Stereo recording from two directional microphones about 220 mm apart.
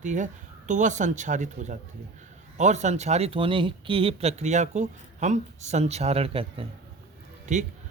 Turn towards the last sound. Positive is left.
turn(degrees=-35)  # may be behind; listen again after turning